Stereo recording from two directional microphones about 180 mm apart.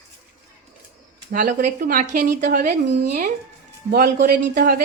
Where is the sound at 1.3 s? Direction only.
50° right (ahead or behind).